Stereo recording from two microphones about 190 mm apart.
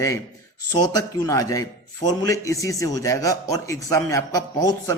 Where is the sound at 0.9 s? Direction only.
20° left (ahead or behind).